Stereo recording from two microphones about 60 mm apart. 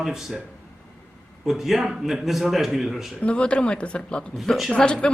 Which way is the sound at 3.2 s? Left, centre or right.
Centre.